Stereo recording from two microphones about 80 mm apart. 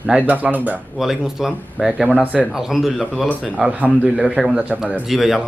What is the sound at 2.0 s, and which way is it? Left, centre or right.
Speech, centre.